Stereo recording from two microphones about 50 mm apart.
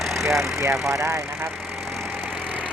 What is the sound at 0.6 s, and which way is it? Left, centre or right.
Speech, right.